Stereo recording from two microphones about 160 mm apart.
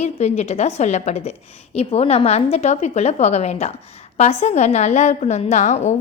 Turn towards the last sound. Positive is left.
turn(degrees=45)  # may be behind; listen again after turning